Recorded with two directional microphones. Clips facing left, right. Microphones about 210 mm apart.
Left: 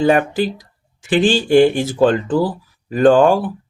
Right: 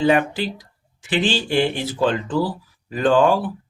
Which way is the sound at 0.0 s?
45° left (ahead or behind).